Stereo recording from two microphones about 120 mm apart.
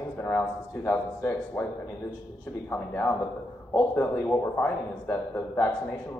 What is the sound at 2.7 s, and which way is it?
A man's voice, 15° left (ahead or behind).